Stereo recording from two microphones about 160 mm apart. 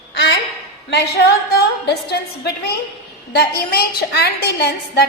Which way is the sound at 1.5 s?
85° left.